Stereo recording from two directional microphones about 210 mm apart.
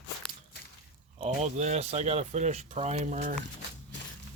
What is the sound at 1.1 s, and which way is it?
Speech, 30° right (ahead or behind).